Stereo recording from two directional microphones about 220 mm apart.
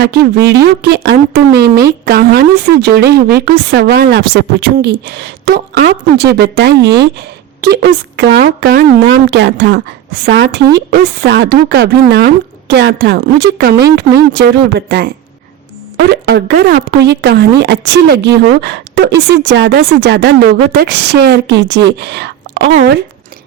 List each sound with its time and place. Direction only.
0.0 s a woman's voice: 50° right (ahead or behind)